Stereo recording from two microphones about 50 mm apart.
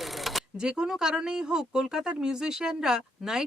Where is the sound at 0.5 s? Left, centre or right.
Centre.